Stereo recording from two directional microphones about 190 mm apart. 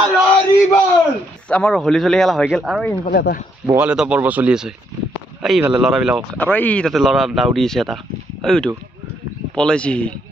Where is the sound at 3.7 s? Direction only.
5° right (ahead or behind).